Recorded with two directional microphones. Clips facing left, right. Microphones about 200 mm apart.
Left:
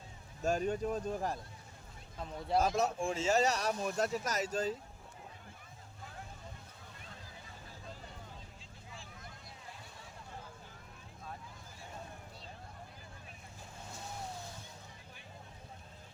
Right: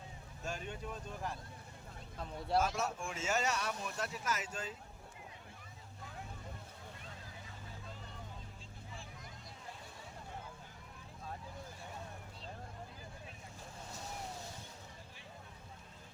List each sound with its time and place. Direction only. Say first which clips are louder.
0.4 s speech: left 11 dB; 40° left (ahead or behind)
2.6 s speech: left 4 dB; 35° left (ahead or behind)